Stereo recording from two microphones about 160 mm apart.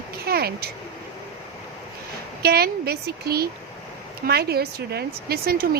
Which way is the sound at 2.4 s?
80° right.